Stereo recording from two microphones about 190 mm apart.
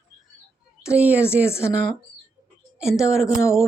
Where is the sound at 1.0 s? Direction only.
5° right (ahead or behind).